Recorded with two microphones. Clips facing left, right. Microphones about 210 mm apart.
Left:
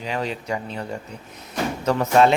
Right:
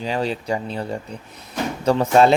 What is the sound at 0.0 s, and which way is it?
Speech, 30° right (ahead or behind).